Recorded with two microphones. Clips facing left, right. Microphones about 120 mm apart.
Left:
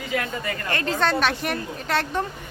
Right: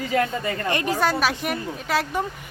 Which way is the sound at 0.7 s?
15° right (ahead or behind).